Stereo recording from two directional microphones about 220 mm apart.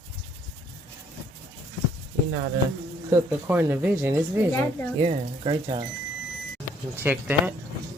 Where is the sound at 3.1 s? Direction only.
10° right (ahead or behind).